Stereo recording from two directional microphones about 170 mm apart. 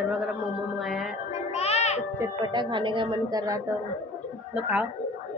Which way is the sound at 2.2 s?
25° right (ahead or behind).